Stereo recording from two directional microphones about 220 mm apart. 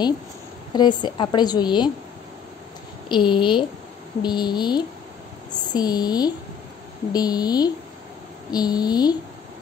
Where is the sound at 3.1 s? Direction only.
20° left (ahead or behind).